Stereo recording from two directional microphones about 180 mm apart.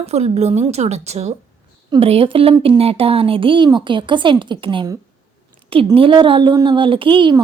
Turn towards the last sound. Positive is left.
turn(degrees=-25)  # may be behind; listen again after turning